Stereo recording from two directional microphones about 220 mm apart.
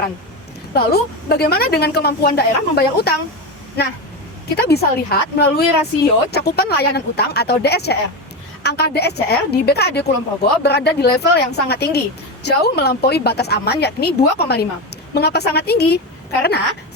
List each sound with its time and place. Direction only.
0.7 s a woman's voice: 45° left (ahead or behind)